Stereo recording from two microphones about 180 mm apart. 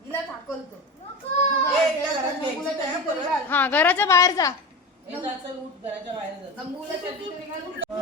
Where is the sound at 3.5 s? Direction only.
10° left (ahead or behind).